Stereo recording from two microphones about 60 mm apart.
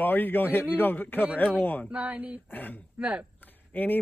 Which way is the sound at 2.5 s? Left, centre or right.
Left.